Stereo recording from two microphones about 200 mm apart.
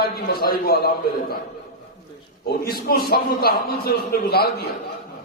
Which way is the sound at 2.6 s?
50° left (ahead or behind).